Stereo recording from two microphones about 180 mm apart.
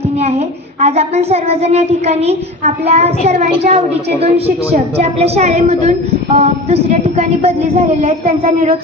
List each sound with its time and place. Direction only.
0.2 s speech: 35° right (ahead or behind)